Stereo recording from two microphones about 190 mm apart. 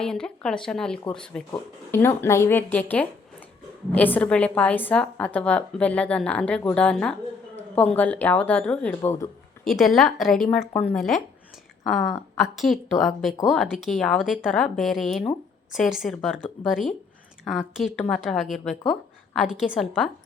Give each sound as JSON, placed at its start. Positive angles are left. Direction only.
{"t": 0.0, "sound": "a woman's voice", "side_deg": 5}
{"t": 9.0, "sound": "a woman's voice", "side_deg": 15}
{"t": 9.6, "sound": "speech", "side_deg": 0}
{"t": 12.4, "sound": "a woman's voice", "side_deg": 0}